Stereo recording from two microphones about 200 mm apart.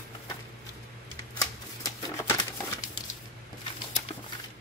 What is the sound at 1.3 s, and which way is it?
Shuffling cards, 15° left (ahead or behind).